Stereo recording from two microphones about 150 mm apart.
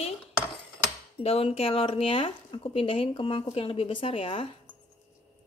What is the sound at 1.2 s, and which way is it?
Speech, 40° left (ahead or behind).